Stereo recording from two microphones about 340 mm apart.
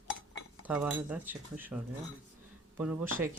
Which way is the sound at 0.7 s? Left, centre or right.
Centre.